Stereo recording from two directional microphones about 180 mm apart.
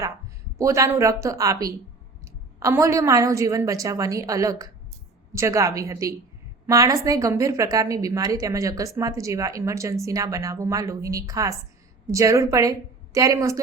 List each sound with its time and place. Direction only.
0.6 s a woman's voice: 15° right (ahead or behind)